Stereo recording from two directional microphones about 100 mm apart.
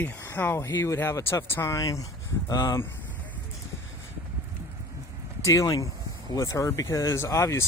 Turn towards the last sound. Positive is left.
turn(degrees=30)  # may be behind; listen again after turning